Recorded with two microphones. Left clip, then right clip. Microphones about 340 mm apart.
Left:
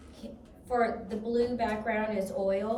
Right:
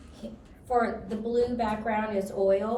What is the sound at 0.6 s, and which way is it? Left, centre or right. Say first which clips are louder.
A woman's voice: right 2 dB; centre.